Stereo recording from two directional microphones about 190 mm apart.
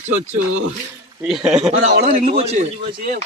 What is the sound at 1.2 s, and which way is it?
Speech, 5° right (ahead or behind).